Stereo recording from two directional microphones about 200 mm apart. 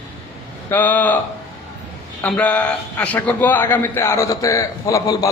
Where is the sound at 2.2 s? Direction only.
10° left (ahead or behind).